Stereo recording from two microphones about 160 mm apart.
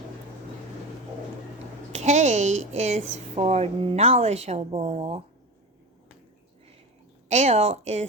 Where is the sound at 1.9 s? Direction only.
45° right (ahead or behind).